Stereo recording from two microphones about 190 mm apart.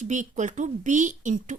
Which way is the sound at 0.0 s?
40° right (ahead or behind).